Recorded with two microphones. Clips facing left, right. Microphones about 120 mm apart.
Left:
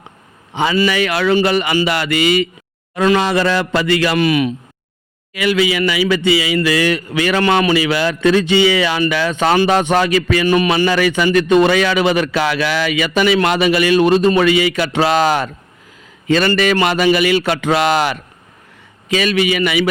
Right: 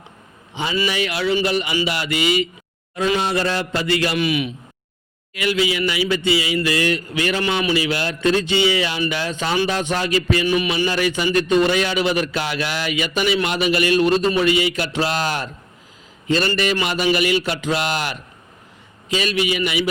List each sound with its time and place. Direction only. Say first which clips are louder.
0.5 s speech: left 7 dB; 70° left (ahead or behind)
2.9 s a man's voice: left 6 dB; 80° left
4.1 s a man's voice: left 6 dB; 50° left (ahead or behind)
5.4 s a man's voice: left 5 dB; 90° left
10.4 s a man's voice: left 6 dB; 55° left (ahead or behind)
10.8 s a man's voice: left 6 dB; 90° left
14.0 s speech: left 5 dB; 55° left (ahead or behind)
14.6 s a man's voice: left 6 dB; 90° left
16.5 s speech: left 6 dB; 70° left (ahead or behind)
19.1 s speech: left 5 dB; 65° left (ahead or behind)